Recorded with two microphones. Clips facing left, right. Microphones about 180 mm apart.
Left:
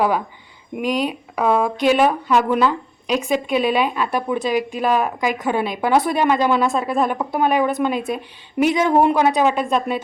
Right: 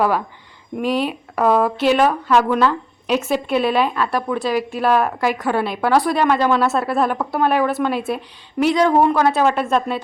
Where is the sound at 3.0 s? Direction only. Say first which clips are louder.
Right 1 dB; 5° right (ahead or behind).